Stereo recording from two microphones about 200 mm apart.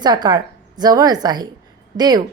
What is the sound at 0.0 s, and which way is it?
A woman's voice, 20° right (ahead or behind).